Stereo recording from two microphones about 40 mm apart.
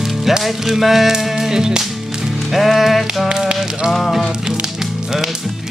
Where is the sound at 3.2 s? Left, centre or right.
Centre.